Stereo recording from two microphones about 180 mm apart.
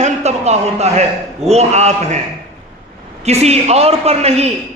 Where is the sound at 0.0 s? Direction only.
35° right (ahead or behind).